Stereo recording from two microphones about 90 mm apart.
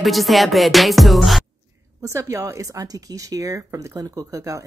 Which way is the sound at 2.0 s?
35° right (ahead or behind).